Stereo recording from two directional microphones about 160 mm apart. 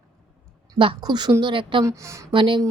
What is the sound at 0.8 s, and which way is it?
A woman's voice, 30° right (ahead or behind).